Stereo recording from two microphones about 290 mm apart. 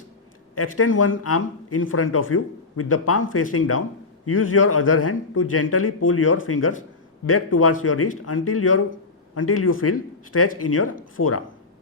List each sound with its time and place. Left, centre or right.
0.5 s speech: left